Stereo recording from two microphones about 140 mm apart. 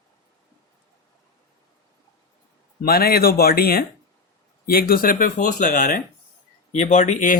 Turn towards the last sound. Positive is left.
turn(degrees=65)  # may be behind; listen again after turning